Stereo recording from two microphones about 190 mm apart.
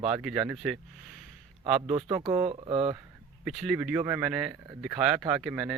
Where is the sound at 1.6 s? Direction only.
30° right (ahead or behind).